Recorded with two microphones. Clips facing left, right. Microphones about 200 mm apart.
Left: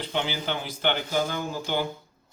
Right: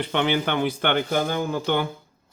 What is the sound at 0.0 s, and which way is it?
Speech, 60° right (ahead or behind).